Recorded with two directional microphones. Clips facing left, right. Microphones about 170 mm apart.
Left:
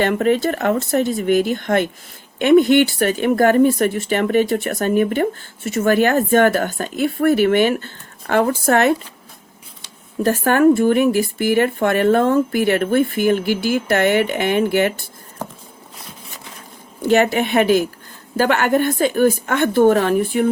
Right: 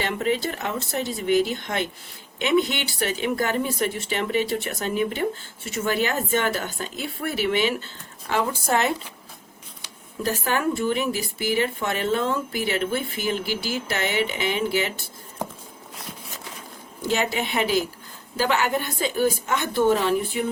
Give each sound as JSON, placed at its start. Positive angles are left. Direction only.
{"t": 0.0, "sound": "speech", "side_deg": 55}
{"t": 10.2, "sound": "speech", "side_deg": 55}
{"t": 17.0, "sound": "speech", "side_deg": 60}